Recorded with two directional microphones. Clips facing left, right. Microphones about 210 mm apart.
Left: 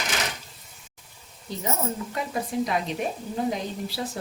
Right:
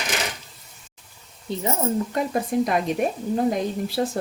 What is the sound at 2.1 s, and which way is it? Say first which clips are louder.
Speech: right 5 dB; 50° right (ahead or behind).